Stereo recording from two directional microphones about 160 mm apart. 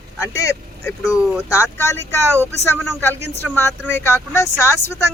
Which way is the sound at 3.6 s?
15° left (ahead or behind).